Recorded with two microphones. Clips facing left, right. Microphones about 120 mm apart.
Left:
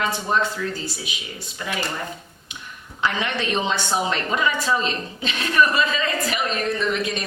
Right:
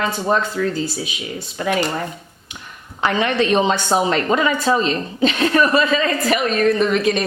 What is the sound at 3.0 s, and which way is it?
A woman's voice, 40° right (ahead or behind).